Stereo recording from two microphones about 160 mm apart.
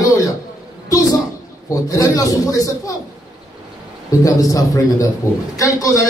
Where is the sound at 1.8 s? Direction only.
20° left (ahead or behind).